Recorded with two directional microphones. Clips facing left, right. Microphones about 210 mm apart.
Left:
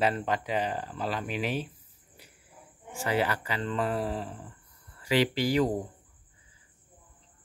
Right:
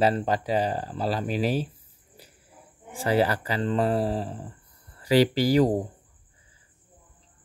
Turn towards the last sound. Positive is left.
turn(degrees=-40)  # may be behind; listen again after turning